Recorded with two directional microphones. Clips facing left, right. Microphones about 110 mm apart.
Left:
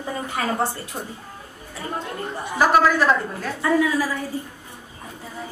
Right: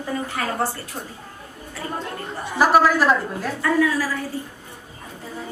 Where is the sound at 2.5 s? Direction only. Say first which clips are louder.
Right 1 dB; 5° right (ahead or behind).